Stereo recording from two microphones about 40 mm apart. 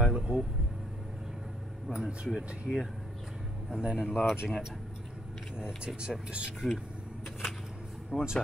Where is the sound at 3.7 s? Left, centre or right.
Right.